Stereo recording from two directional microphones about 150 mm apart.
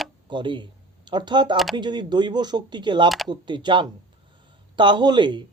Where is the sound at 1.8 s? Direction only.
30° right (ahead or behind).